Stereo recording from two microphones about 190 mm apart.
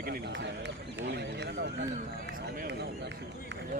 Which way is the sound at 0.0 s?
55° right (ahead or behind).